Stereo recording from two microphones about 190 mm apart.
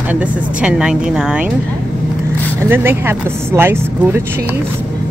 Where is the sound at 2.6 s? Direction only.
10° right (ahead or behind).